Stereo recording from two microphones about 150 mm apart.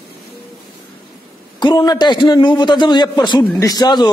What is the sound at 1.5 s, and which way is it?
A man's voice, 30° left (ahead or behind).